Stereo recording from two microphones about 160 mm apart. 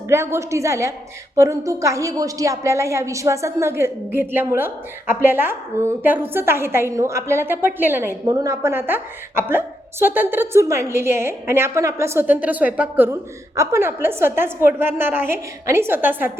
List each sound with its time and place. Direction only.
0.1 s a woman's voice: 15° right (ahead or behind)